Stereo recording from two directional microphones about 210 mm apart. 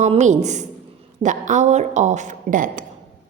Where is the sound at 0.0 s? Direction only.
35° right (ahead or behind).